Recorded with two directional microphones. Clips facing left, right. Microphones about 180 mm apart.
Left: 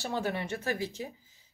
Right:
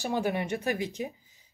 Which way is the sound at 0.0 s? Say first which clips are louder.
Right 4 dB; 15° right (ahead or behind).